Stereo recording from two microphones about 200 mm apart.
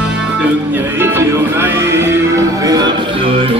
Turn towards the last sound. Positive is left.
turn(degrees=-25)  # may be behind; listen again after turning